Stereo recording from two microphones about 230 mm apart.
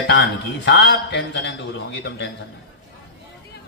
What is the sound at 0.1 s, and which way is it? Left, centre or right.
A man's voice, left.